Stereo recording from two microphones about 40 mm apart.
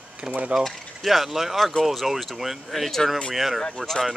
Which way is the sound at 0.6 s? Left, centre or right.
Centre.